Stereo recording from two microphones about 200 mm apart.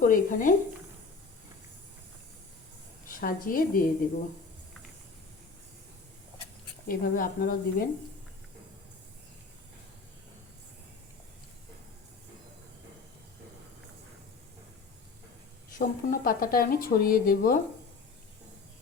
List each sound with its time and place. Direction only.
0.0 s a woman's voice: 40° left (ahead or behind)
3.1 s speech: 45° left (ahead or behind)
6.8 s speech: 45° left (ahead or behind)
15.8 s speech: 45° left (ahead or behind)